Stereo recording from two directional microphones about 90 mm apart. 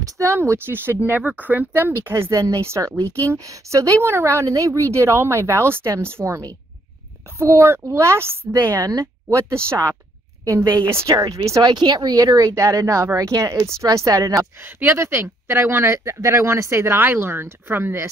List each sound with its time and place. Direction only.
0.0 s a woman's voice: 35° right (ahead or behind)
7.3 s a woman's voice: 30° right (ahead or behind)
10.9 s a woman's voice: 30° right (ahead or behind)
14.6 s speech: 25° right (ahead or behind)